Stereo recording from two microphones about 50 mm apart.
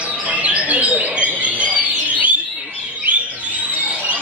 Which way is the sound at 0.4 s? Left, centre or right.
Right.